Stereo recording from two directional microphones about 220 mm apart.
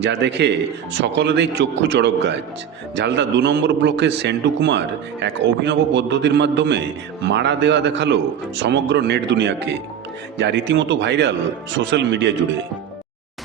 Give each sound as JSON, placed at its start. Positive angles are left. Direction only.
{"t": 0.0, "sound": "a man's voice", "side_deg": -50}